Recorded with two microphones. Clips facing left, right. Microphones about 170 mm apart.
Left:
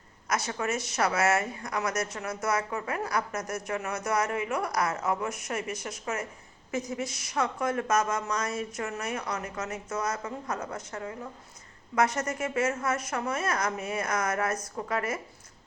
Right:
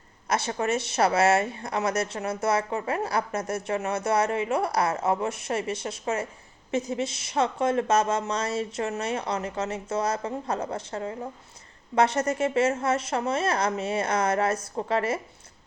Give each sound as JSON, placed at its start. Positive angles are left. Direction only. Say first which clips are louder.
{"t": 0.3, "sound": "speech", "louder": "right 4 dB", "side_deg": -30}